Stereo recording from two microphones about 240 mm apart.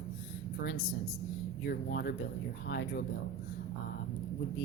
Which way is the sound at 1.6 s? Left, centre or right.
Left.